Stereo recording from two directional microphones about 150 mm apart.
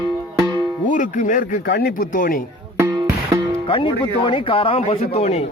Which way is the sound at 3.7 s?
35° left (ahead or behind).